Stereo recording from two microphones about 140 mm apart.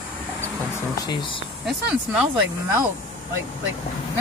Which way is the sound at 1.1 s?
35° left (ahead or behind).